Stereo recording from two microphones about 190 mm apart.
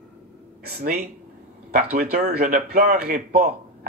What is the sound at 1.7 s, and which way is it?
Speech, 50° right (ahead or behind).